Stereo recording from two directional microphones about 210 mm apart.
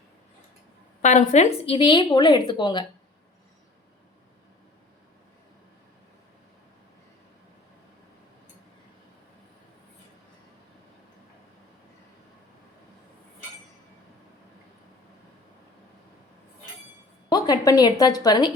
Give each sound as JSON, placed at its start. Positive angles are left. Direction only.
{"t": 1.0, "sound": "a woman's voice", "side_deg": 35}
{"t": 1.6, "sound": "a woman's voice", "side_deg": 25}
{"t": 17.2, "sound": "a sound", "side_deg": 20}